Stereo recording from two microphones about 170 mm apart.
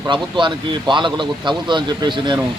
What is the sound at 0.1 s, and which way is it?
Speech, 30° right (ahead or behind).